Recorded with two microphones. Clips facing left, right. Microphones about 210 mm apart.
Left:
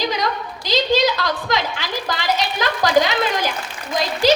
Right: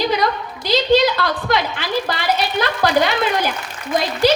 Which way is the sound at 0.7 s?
55° right (ahead or behind).